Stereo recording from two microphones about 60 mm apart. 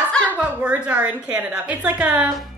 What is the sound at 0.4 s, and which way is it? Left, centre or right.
A woman's voice, right.